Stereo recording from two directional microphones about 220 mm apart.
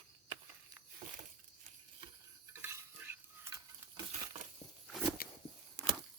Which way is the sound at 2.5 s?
10° right (ahead or behind).